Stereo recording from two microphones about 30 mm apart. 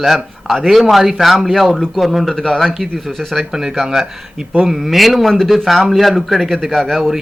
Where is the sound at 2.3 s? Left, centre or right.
Centre.